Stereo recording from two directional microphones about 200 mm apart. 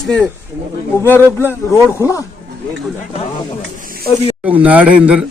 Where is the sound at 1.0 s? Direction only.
10° left (ahead or behind).